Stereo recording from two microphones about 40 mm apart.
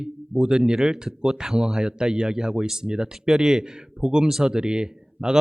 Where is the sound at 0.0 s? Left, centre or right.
Right.